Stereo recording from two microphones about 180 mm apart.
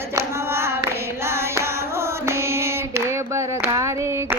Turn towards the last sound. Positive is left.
turn(degrees=-15)  # may be behind; listen again after turning